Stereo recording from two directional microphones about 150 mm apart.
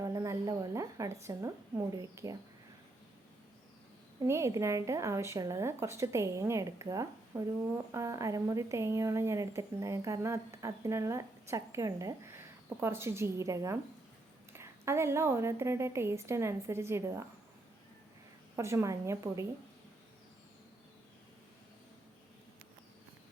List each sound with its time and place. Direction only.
0.0 s a sound: 20° right (ahead or behind)
4.2 s a woman's voice: 20° right (ahead or behind)
18.5 s speech: 20° right (ahead or behind)